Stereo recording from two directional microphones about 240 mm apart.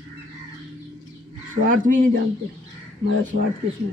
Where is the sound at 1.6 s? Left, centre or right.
Right.